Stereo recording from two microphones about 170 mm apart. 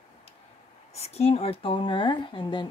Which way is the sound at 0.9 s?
40° left (ahead or behind).